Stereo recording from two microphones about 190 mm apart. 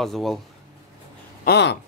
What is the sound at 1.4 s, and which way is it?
Speech, 60° left (ahead or behind).